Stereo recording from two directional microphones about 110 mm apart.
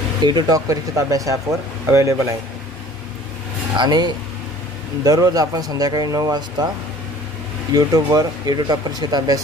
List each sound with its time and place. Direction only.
0.2 s speech: 40° right (ahead or behind)
0.7 s speech: 30° right (ahead or behind)
3.7 s speech: 40° right (ahead or behind)
7.7 s speech: 35° right (ahead or behind)